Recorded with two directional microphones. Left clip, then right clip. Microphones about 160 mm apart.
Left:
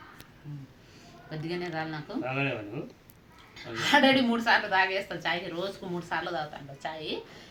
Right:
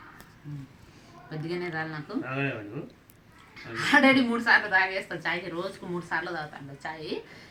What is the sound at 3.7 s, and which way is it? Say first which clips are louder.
A woman's voice: right 1 dB; 20° left (ahead or behind).